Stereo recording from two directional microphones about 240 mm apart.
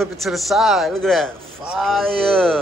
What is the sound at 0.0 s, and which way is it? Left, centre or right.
A man's voice, centre.